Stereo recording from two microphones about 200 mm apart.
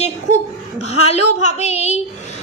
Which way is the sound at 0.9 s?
30° left (ahead or behind).